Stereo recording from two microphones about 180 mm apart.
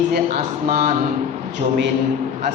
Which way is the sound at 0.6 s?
45° right (ahead or behind).